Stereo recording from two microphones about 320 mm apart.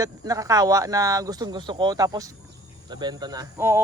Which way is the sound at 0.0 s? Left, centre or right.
Centre.